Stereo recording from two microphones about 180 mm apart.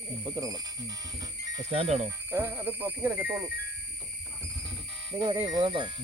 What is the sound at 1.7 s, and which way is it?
Speech, 35° right (ahead or behind).